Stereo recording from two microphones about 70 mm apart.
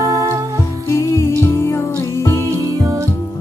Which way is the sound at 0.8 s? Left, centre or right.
Left.